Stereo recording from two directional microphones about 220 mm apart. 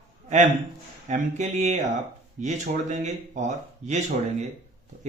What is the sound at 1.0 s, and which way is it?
A man's voice, 30° right (ahead or behind).